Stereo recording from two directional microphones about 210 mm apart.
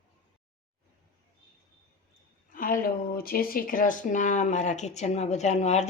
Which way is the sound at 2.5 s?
40° left (ahead or behind).